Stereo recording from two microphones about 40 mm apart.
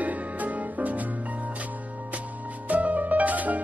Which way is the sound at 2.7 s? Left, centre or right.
Right.